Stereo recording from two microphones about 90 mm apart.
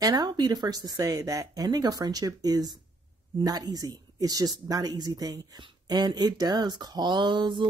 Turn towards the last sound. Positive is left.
turn(degrees=-60)  # may be behind; listen again after turning